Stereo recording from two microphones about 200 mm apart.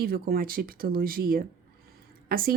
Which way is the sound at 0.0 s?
50° right (ahead or behind).